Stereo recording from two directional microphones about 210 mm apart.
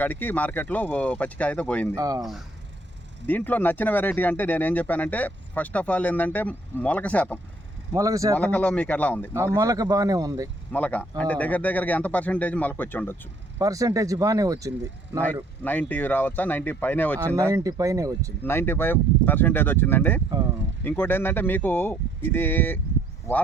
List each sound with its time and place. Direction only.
0.0 s speech: 10° left (ahead or behind)
2.0 s speech: 15° right (ahead or behind)
3.2 s speech: 10° left (ahead or behind)
7.9 s speech: 15° right (ahead or behind)
8.4 s speech: 5° left (ahead or behind)
9.3 s speech: 15° right (ahead or behind)
10.7 s speech: 5° left (ahead or behind)
13.6 s speech: 15° right (ahead or behind)
15.6 s speech: 10° left (ahead or behind)
17.2 s speech: 15° right (ahead or behind)
18.4 s speech: 10° left (ahead or behind)